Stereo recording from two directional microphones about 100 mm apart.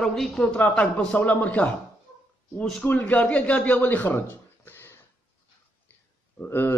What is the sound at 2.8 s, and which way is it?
A man's voice, 15° left (ahead or behind).